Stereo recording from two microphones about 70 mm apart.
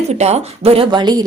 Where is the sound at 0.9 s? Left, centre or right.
Right.